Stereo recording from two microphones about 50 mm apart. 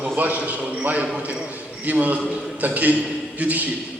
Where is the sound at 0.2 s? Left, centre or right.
Right.